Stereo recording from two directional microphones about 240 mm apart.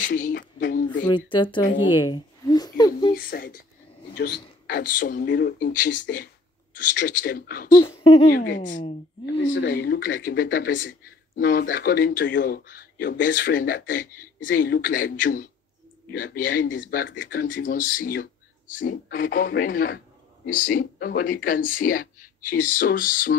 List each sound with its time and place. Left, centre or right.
0.0 s speech: left
1.0 s speech: centre
1.9 s a sound: centre
3.2 s speech: left
6.8 s speech: left
7.7 s speech: left
8.3 s speech: left
9.4 s speech: left
9.7 s speech: left